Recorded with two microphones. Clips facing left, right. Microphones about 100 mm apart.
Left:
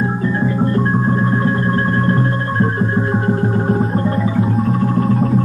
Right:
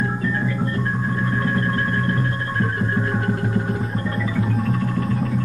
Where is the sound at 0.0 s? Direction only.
25° left (ahead or behind).